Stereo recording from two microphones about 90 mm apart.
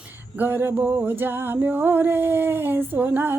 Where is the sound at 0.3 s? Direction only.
25° right (ahead or behind).